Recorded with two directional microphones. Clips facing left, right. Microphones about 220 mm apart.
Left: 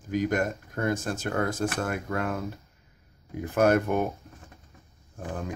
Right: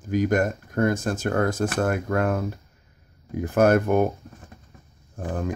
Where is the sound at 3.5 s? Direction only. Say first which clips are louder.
Right 4 dB; 45° right (ahead or behind).